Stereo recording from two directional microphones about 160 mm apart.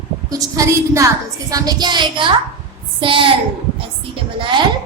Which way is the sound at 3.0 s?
35° right (ahead or behind).